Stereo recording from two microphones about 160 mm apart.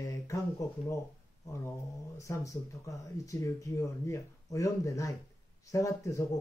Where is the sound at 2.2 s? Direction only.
20° left (ahead or behind).